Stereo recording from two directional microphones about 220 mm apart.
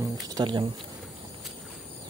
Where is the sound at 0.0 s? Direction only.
20° right (ahead or behind).